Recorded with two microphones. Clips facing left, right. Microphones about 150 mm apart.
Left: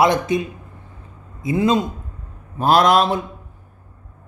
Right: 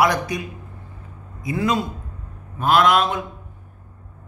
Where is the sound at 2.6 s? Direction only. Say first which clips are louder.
Left 2 dB; 35° left (ahead or behind).